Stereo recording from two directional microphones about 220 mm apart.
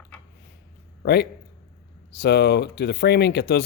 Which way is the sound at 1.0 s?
45° left (ahead or behind).